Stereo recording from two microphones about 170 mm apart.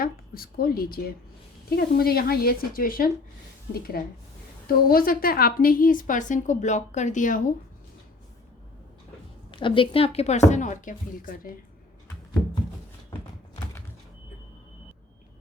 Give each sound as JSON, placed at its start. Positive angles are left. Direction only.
{"t": 0.0, "sound": "a woman's voice", "side_deg": 60}
{"t": 4.6, "sound": "a woman's voice", "side_deg": 60}
{"t": 9.5, "sound": "a woman's voice", "side_deg": 30}